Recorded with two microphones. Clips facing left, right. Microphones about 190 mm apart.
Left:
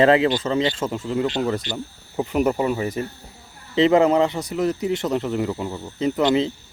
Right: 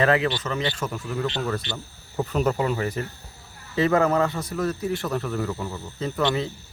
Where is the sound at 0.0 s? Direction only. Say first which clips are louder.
Left 5 dB; 25° left (ahead or behind).